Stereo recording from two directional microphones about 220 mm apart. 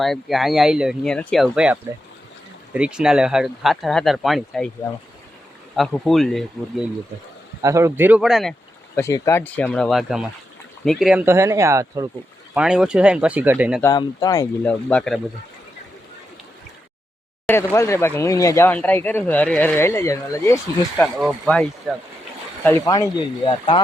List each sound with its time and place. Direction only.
0.0 s speech: centre (ahead or behind)
5.7 s speech: centre (ahead or behind)
7.6 s speech: 15° right (ahead or behind)
9.0 s speech: 15° left (ahead or behind); by 12.0 s 15° right (ahead or behind)
12.5 s speech: 5° right (ahead or behind)
13.8 s speech: 15° left (ahead or behind)
17.4 s speech: 10° left (ahead or behind)
21.0 s speech: centre (ahead or behind)
22.6 s speech: 10° left (ahead or behind)